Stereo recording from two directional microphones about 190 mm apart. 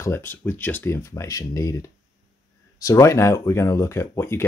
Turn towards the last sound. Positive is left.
turn(degrees=15)  # may be behind; listen again after turning